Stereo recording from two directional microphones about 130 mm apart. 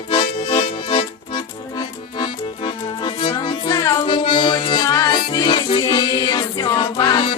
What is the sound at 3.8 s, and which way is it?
Music, 20° left (ahead or behind).